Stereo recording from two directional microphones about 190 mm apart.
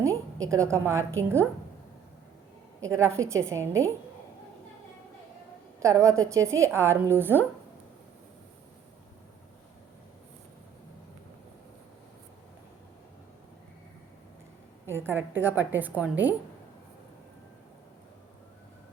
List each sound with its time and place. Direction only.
0.0 s a woman's voice: 15° right (ahead or behind)
2.9 s a woman's voice: 15° right (ahead or behind)
5.8 s a woman's voice: 15° right (ahead or behind)
14.8 s a woman's voice: 10° right (ahead or behind)